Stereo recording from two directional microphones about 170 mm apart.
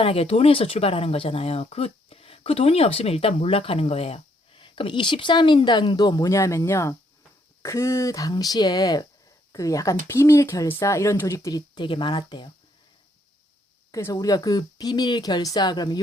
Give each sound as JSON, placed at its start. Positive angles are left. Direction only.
{"t": 0.0, "sound": "speech", "side_deg": 35}
{"t": 13.9, "sound": "speech", "side_deg": 20}